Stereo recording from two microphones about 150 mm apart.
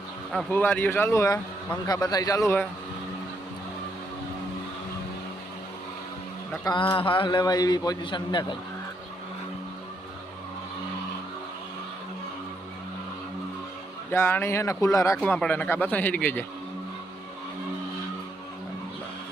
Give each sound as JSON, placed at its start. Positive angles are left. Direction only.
{"t": 0.5, "sound": "speech", "side_deg": 10}
{"t": 6.7, "sound": "a man's voice", "side_deg": 30}
{"t": 14.1, "sound": "speech", "side_deg": 15}
{"t": 15.2, "sound": "speech", "side_deg": 10}